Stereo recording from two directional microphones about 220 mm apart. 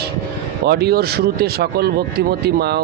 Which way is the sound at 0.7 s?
45° right (ahead or behind).